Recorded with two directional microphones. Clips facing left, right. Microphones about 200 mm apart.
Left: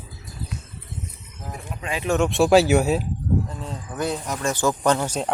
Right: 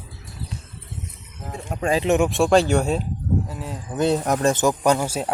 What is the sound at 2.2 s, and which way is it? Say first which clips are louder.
Speech: left 1 dB; centre (ahead or behind).